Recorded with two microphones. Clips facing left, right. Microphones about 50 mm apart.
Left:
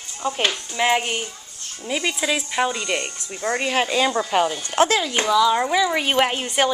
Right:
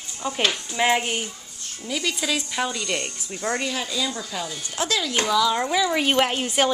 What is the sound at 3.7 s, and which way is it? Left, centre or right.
Speech, left.